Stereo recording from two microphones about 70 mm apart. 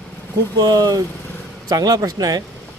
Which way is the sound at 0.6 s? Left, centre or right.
Right.